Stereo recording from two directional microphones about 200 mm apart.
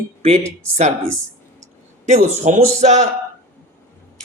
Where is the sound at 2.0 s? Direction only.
35° right (ahead or behind).